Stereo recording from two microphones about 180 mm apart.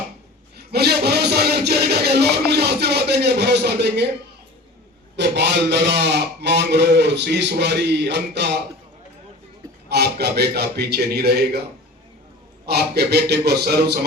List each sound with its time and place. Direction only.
0.7 s music: 65° right (ahead or behind)
5.1 s a man's voice: 70° right (ahead or behind)
9.9 s a man's voice: 65° right (ahead or behind)
12.6 s a man's voice: 65° right (ahead or behind)